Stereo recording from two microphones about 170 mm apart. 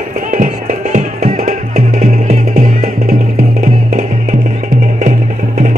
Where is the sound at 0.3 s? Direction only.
50° right (ahead or behind).